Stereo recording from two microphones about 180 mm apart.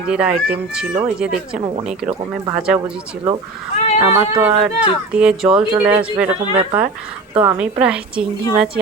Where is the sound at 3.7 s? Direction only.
40° left (ahead or behind).